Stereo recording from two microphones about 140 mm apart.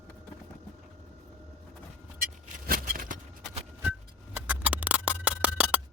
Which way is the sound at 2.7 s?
85° right.